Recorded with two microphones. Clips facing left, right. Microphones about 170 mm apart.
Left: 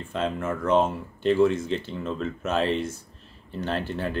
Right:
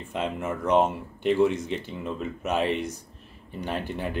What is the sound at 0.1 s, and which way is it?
Speech, 15° right (ahead or behind).